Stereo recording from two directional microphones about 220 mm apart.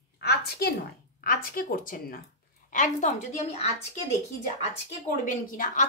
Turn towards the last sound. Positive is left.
turn(degrees=40)  # may be behind; listen again after turning